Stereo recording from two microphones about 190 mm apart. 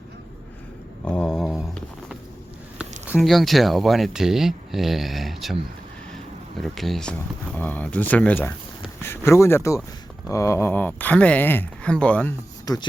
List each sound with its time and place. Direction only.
1.0 s a sound: 5° left (ahead or behind)
3.1 s speech: centre (ahead or behind)
6.6 s speech: centre (ahead or behind)
12.7 s speech: 20° left (ahead or behind)